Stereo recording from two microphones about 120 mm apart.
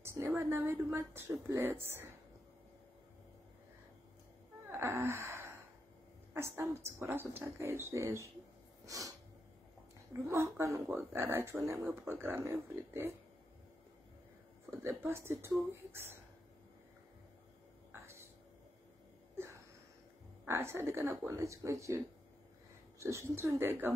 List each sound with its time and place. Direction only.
0.0 s a woman's voice: 20° right (ahead or behind)
4.6 s gasp: 20° right (ahead or behind)
6.3 s a woman's voice: 20° right (ahead or behind)
8.8 s snort: 30° right (ahead or behind)
10.2 s a woman's voice: 25° right (ahead or behind)
14.8 s a woman's voice: 20° right (ahead or behind)
19.3 s wheeze: 20° right (ahead or behind)
20.4 s a woman's voice: 20° right (ahead or behind)